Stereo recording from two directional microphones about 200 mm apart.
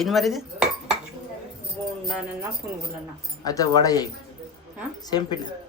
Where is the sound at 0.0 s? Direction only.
Centre (ahead or behind).